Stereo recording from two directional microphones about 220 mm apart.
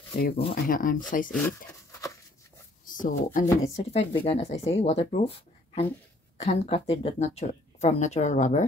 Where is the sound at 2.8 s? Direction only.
40° left (ahead or behind).